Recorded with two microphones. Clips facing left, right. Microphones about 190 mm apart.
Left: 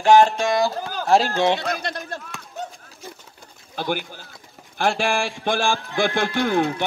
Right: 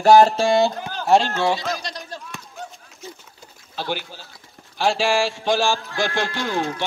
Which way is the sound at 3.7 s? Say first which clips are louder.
Left 2 dB; 50° left (ahead or behind).